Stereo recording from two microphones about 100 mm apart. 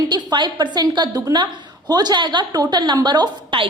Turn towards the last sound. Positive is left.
turn(degrees=-50)  # may be behind; listen again after turning